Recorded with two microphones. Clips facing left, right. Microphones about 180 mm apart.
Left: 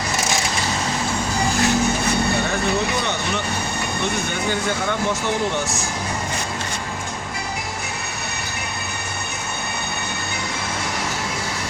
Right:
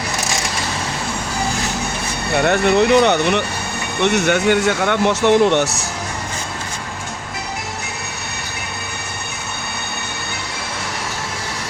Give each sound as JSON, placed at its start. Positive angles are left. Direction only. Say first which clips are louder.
{"t": 2.4, "sound": "speech", "louder": "right 7 dB", "side_deg": -70}